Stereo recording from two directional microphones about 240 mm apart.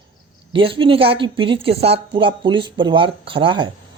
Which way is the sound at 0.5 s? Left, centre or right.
Right.